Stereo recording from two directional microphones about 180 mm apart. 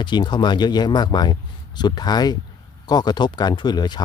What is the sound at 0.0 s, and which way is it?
Speech, 25° left (ahead or behind).